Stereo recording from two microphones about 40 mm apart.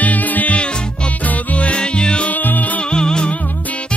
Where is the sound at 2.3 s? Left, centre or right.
Left.